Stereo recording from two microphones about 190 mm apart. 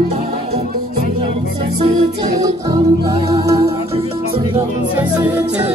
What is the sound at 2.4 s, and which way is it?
Music, 20° right (ahead or behind).